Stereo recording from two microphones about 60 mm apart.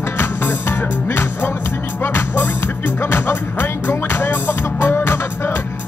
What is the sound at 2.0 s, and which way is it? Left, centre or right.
Music, left.